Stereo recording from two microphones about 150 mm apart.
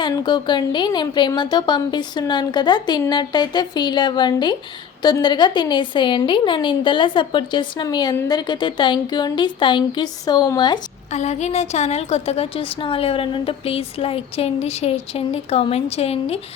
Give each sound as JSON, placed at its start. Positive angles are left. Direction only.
{"t": 0.1, "sound": "a woman's voice", "side_deg": 30}
{"t": 11.1, "sound": "a woman's voice", "side_deg": 50}